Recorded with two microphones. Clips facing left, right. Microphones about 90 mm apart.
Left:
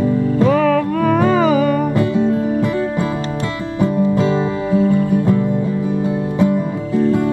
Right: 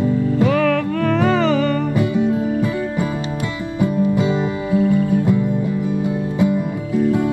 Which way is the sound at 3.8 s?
20° left (ahead or behind).